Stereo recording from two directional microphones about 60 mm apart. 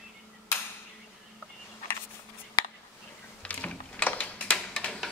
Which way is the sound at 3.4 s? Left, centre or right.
Left.